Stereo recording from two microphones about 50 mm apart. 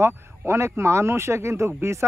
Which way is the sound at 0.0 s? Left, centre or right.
Right.